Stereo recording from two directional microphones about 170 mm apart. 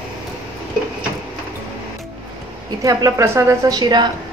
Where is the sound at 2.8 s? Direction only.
20° right (ahead or behind).